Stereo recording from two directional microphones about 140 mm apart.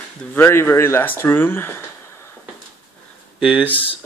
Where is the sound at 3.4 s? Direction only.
5° right (ahead or behind).